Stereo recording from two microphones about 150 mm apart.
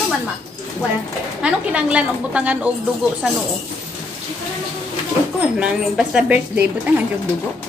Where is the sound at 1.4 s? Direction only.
5° right (ahead or behind).